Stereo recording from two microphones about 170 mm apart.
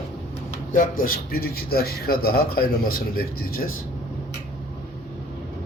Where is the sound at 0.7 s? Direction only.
55° left (ahead or behind).